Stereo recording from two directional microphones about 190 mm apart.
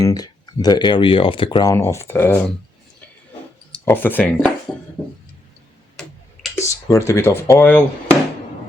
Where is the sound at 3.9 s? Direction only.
10° left (ahead or behind).